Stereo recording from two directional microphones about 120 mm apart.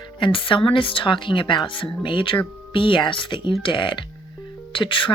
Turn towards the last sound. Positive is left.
turn(degrees=45)  # may be behind; listen again after turning